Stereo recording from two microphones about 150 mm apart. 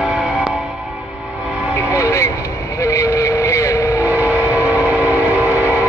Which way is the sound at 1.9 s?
20° left (ahead or behind).